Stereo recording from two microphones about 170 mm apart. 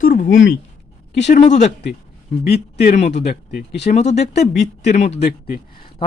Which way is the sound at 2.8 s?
45° left (ahead or behind).